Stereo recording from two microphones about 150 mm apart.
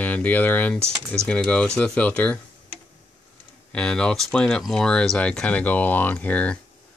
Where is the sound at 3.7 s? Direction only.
5° left (ahead or behind).